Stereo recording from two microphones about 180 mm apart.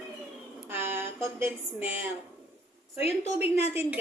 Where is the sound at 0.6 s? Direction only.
15° right (ahead or behind).